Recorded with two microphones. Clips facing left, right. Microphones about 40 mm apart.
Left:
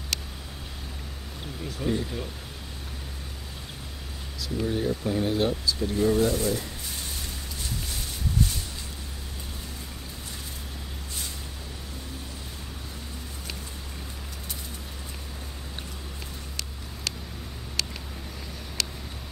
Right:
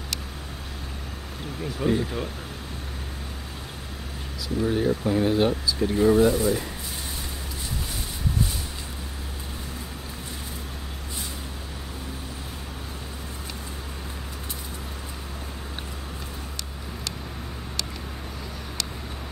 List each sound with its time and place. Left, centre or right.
1.6 s speech: centre
4.6 s speech: centre